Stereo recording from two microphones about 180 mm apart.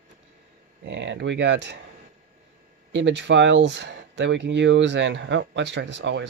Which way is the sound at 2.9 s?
80° right.